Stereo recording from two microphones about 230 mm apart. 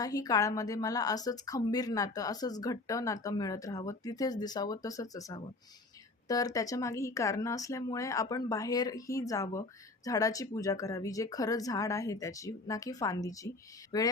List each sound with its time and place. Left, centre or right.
0.0 s speech: centre